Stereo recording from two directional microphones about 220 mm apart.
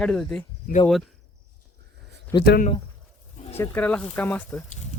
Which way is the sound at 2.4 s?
45° left (ahead or behind).